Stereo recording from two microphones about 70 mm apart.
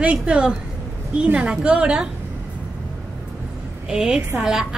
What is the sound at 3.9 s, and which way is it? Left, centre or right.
Speech, centre.